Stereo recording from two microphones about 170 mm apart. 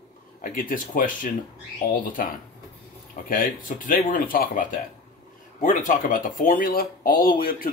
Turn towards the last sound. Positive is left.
turn(degrees=60)  # may be behind; listen again after turning